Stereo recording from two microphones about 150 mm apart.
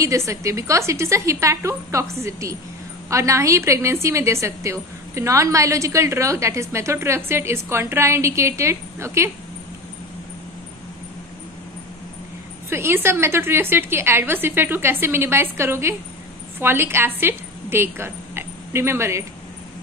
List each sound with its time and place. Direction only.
0.0 s a woman's voice: 20° right (ahead or behind)
12.6 s a woman's voice: 15° right (ahead or behind)